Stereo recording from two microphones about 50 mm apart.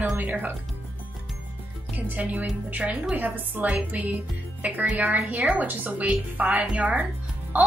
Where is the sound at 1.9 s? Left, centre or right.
Right.